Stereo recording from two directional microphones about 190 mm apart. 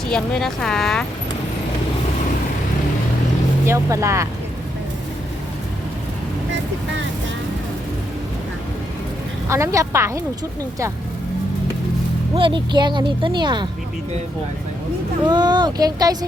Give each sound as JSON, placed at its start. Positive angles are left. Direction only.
{"t": 0.1, "sound": "speech", "side_deg": 0}
{"t": 3.7, "sound": "speech", "side_deg": -15}
{"t": 9.5, "sound": "speech", "side_deg": -15}
{"t": 12.3, "sound": "speech", "side_deg": -25}
{"t": 15.2, "sound": "speech", "side_deg": -25}